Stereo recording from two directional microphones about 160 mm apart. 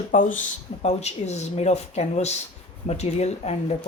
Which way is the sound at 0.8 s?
45° left (ahead or behind).